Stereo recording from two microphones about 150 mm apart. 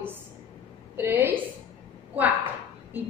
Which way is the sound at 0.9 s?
15° right (ahead or behind).